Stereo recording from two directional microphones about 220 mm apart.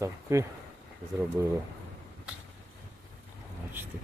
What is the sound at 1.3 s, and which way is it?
Speech, 10° right (ahead or behind).